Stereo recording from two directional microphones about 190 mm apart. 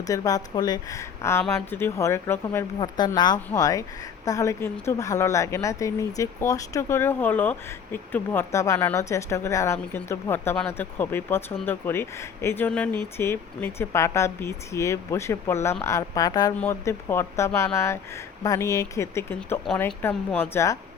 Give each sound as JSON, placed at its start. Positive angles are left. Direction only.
{"t": 0.1, "sound": "a woman's voice", "side_deg": 20}